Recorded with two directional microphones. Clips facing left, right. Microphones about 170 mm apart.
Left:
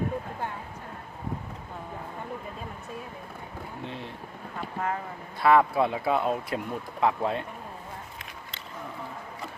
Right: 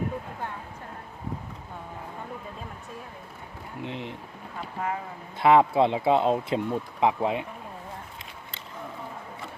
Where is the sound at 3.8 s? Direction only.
20° right (ahead or behind).